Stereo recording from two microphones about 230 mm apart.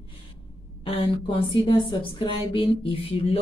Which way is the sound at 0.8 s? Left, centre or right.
Left.